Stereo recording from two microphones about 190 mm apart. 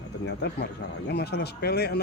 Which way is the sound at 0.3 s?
60° left (ahead or behind).